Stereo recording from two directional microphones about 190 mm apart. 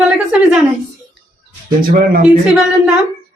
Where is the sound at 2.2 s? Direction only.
5° right (ahead or behind).